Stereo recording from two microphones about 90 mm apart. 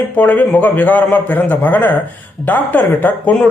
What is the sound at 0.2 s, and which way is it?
Speech, 20° left (ahead or behind).